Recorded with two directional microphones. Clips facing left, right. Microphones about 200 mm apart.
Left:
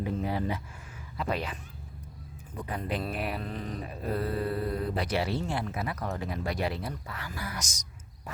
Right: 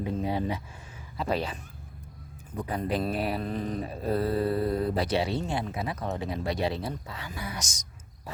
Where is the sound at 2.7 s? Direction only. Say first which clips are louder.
Right 4 dB; 35° right (ahead or behind).